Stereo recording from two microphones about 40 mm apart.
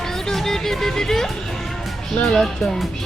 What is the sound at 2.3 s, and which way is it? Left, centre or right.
Speech, centre.